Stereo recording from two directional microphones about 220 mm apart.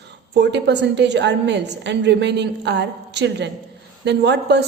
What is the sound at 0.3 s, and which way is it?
A woman's voice, 50° right (ahead or behind).